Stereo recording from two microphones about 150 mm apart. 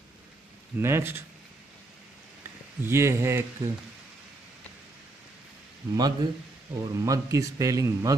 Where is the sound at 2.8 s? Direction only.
15° right (ahead or behind).